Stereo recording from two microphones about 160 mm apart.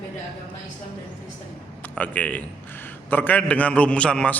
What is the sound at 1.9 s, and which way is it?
A man's voice, 10° left (ahead or behind).